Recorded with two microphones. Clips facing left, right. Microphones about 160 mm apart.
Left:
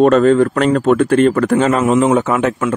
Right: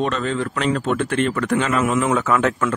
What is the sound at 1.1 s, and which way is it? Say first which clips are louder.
Speech: left 8 dB; 40° left (ahead or behind).